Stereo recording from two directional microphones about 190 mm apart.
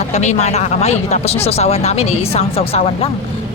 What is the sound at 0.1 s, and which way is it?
Speech, 35° left (ahead or behind).